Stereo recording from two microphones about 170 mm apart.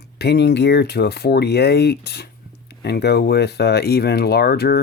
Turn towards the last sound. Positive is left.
turn(degrees=65)  # may be behind; listen again after turning